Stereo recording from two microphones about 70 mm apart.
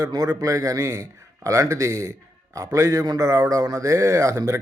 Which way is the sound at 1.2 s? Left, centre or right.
Right.